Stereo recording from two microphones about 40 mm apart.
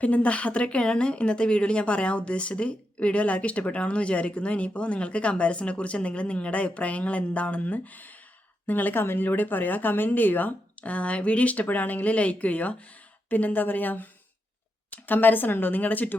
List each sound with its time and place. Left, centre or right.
0.0 s speech: left
10.8 s speech: left
11.5 s speech: left